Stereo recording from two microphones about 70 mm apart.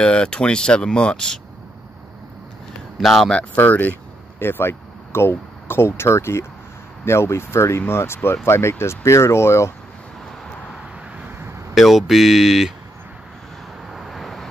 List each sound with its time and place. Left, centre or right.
0.0 s speech: centre
3.0 s speech: centre
3.5 s speech: left
11.7 s speech: centre
13.9 s vehicle: centre